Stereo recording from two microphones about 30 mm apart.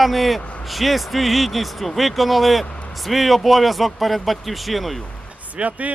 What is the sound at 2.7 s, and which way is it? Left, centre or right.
Vehicle, left.